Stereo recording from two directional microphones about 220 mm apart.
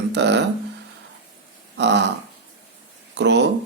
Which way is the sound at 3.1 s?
50° right (ahead or behind).